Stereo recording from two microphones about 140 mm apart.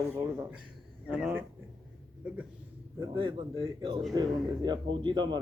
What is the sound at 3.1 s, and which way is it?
Speech, 35° right (ahead or behind).